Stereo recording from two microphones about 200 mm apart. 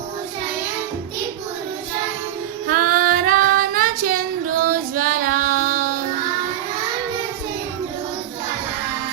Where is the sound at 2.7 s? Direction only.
45° right (ahead or behind).